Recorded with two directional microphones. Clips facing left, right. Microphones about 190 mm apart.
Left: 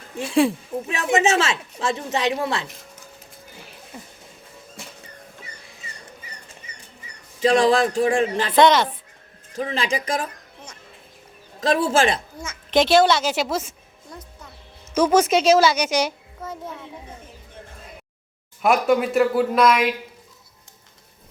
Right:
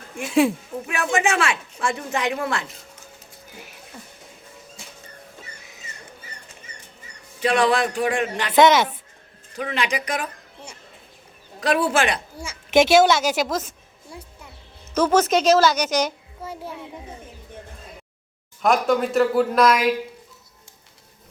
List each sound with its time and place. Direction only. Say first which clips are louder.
0.9 s a woman's voice: left 2 dB; 20° left (ahead or behind)
3.9 s music: left 3 dB; 20° left (ahead or behind)
4.8 s a sound: left 6 dB; 60° left (ahead or behind)
7.4 s a woman's voice: left 3 dB; 25° left (ahead or behind)
8.5 s speech: right 1 dB; 5° right (ahead or behind)
9.6 s a woman's voice: left 1 dB; 30° left (ahead or behind)
11.6 s a woman's voice: left 1 dB; 25° left (ahead or behind)
12.8 s speech: right 1 dB; 5° right (ahead or behind)
13.5 s a woman's voice: left 1 dB; 10° left (ahead or behind)
14.1 s a woman's voice: even; 10° right (ahead or behind)
14.9 s a woman's voice: left 1 dB; 10° left (ahead or behind)
18.6 s speech: left 1 dB; 5° left (ahead or behind)